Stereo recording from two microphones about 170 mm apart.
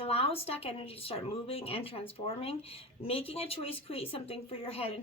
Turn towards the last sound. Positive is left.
turn(degrees=35)  # may be behind; listen again after turning